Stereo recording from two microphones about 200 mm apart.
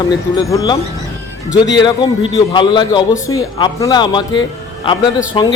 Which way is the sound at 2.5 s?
25° left (ahead or behind).